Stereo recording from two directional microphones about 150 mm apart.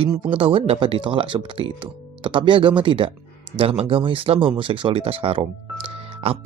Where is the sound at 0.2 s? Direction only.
40° right (ahead or behind).